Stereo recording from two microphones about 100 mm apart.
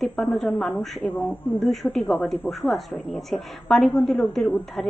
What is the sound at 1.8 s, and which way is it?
A woman's voice, centre (ahead or behind).